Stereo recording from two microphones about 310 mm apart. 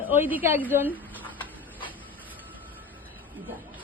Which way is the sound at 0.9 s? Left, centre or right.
Centre.